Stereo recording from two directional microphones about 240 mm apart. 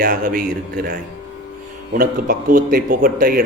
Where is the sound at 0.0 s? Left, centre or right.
Right.